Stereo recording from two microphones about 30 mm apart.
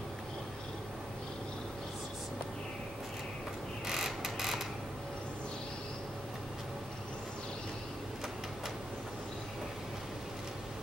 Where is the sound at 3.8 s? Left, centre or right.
Centre.